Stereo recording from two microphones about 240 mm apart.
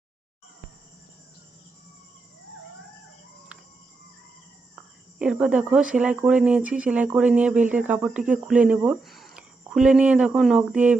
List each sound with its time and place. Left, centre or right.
5.2 s speech: centre